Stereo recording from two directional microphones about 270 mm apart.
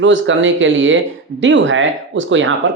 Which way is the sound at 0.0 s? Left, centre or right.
Right.